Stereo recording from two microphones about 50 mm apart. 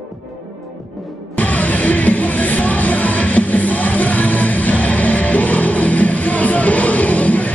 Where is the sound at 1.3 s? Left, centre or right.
Left.